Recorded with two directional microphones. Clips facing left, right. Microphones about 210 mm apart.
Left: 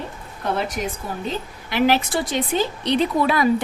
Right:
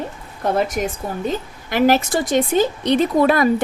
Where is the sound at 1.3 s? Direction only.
45° right (ahead or behind).